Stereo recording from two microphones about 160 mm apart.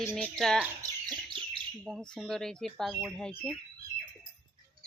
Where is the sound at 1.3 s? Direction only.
35° right (ahead or behind).